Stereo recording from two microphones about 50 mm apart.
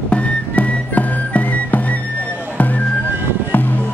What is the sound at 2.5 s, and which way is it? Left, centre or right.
Music, left.